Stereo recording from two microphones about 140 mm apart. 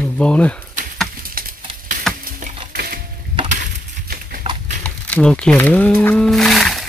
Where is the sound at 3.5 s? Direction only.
75° right (ahead or behind).